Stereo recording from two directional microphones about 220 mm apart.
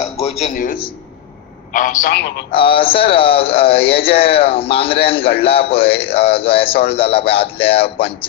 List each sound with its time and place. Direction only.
0.0 s a man's voice: 30° left (ahead or behind)
2.5 s a man's voice: 25° left (ahead or behind)